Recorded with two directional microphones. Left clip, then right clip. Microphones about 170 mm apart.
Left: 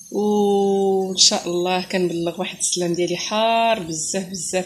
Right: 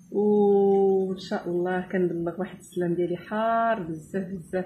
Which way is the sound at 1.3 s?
35° left (ahead or behind).